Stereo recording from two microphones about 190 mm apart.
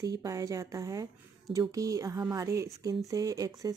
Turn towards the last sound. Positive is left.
turn(degrees=-20)  # may be behind; listen again after turning